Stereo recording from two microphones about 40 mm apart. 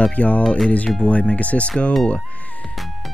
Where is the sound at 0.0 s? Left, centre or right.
Left.